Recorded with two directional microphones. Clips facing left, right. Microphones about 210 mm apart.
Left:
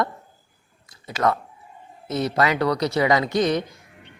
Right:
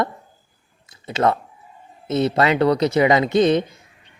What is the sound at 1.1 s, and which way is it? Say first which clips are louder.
Speech: right 3 dB; 25° right (ahead or behind).